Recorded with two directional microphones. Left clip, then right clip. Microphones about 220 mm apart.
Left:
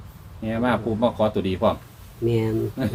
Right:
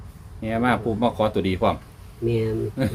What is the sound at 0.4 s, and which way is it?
Speech, 30° right (ahead or behind).